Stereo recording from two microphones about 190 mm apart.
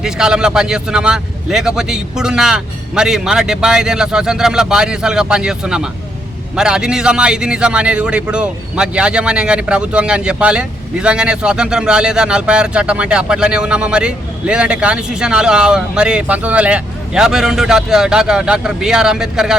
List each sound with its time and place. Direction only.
0.0 s a man's voice: 5° right (ahead or behind)